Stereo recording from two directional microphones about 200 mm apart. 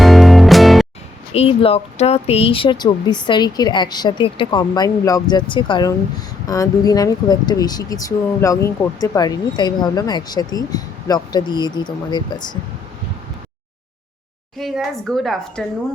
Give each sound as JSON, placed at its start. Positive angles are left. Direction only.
{"t": 0.0, "sound": "music", "side_deg": 0}
{"t": 1.3, "sound": "speech", "side_deg": 30}
{"t": 14.6, "sound": "a woman's voice", "side_deg": 0}